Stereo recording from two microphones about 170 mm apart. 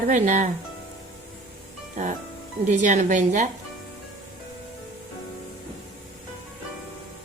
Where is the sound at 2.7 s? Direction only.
45° right (ahead or behind).